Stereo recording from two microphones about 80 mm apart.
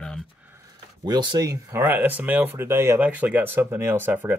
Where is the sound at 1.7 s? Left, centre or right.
Right.